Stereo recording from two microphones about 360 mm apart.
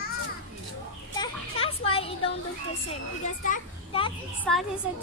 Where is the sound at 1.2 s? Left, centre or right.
Centre.